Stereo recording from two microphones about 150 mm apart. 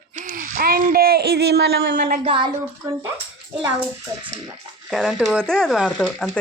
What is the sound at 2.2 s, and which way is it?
Speech, 35° right (ahead or behind).